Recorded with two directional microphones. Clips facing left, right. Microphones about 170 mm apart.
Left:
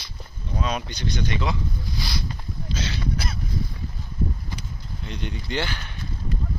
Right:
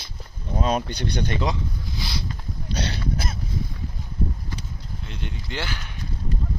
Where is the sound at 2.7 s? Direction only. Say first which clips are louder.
Right 1 dB; 60° right (ahead or behind).